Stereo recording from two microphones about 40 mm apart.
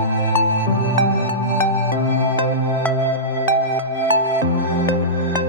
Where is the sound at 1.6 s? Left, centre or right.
Left.